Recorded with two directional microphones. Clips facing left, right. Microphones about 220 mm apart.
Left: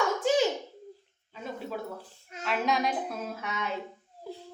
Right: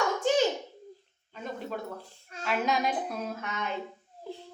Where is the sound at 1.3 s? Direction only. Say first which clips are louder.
Even; 5° left (ahead or behind).